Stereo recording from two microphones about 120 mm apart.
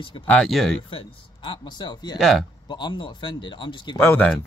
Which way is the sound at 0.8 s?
50° left (ahead or behind).